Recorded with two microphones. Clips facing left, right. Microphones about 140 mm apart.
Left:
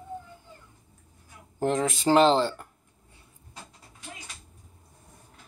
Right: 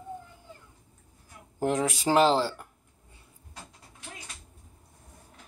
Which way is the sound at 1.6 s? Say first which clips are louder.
Left 1 dB; 10° right (ahead or behind).